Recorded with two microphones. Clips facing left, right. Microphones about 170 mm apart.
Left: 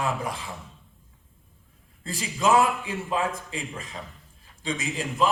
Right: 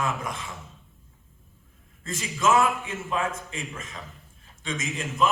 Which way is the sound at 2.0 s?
35° left (ahead or behind).